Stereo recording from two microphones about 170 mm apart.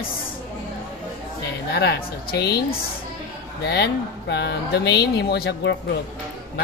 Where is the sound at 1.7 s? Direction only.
70° left (ahead or behind).